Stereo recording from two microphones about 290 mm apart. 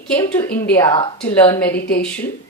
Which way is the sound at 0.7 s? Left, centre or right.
Centre.